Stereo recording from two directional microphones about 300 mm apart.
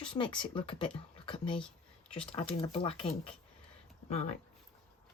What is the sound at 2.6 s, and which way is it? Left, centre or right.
Speech, centre.